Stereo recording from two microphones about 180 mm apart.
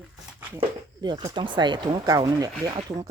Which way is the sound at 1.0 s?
25° right (ahead or behind).